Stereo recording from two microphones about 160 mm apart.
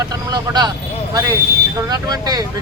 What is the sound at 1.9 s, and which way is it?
Speech, 25° right (ahead or behind).